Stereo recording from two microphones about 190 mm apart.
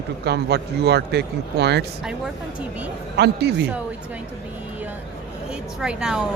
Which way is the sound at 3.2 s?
60° right (ahead or behind).